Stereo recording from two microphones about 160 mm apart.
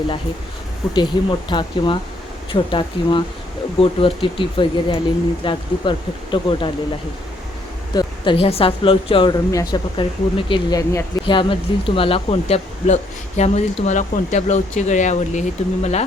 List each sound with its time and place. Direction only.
0.9 s speech: 30° left (ahead or behind)
7.9 s speech: 30° left (ahead or behind)
9.5 s speech: 25° left (ahead or behind); by 16.0 s 45° left (ahead or behind)